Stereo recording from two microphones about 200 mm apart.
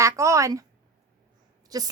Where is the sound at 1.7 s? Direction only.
20° right (ahead or behind).